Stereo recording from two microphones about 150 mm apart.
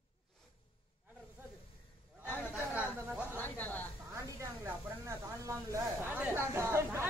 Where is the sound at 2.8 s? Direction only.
15° left (ahead or behind).